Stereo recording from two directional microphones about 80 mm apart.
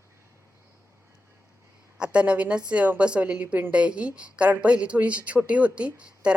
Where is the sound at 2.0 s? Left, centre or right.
Centre.